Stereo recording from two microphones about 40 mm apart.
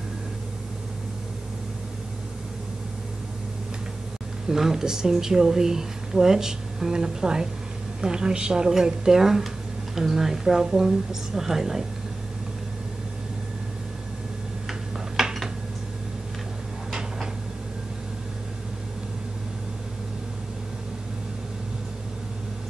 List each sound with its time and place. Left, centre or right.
4.5 s a woman's voice: centre
14.7 s tick-tock: centre